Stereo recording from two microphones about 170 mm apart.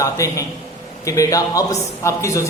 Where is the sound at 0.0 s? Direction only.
20° left (ahead or behind).